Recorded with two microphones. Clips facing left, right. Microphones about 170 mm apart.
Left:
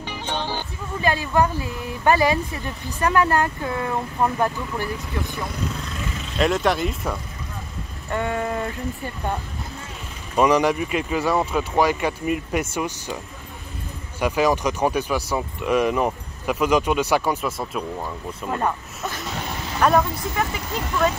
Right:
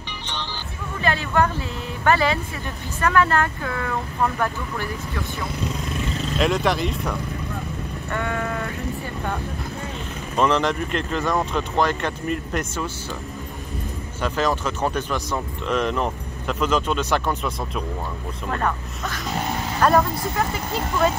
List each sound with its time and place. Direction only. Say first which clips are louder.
0.3 s music: left 6 dB; 50° left (ahead or behind)
1.0 s speech: left 1 dB; 15° left (ahead or behind)
6.3 s speech: left 1 dB; centre (ahead or behind)
8.1 s speech: left 2 dB; 20° left (ahead or behind)
10.3 s speech: left 3 dB; 10° left (ahead or behind)
14.2 s speech: left 3 dB; 10° left (ahead or behind)
18.5 s speech: left 1 dB; 15° left (ahead or behind)
19.8 s speech: even; centre (ahead or behind)